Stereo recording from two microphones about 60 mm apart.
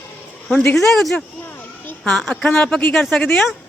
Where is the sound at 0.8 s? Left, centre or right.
Centre.